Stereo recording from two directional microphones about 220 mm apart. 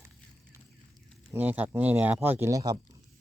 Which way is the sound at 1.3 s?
10° right (ahead or behind).